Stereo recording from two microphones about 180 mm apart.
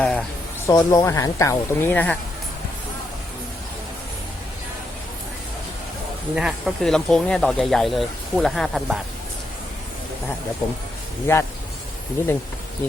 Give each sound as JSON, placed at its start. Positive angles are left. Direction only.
{"t": 0.0, "sound": "speech", "side_deg": 5}
{"t": 0.7, "sound": "speech", "side_deg": 15}
{"t": 6.3, "sound": "speech", "side_deg": 0}
{"t": 11.3, "sound": "speech", "side_deg": 15}